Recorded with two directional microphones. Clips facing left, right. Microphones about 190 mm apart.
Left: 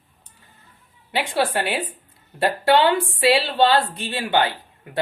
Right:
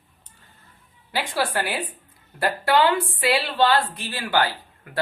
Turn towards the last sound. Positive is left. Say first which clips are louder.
# left 2 dB
turn(degrees=25)  # may be behind; listen again after turning